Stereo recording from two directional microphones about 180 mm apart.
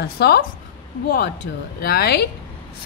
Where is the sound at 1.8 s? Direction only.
65° left (ahead or behind).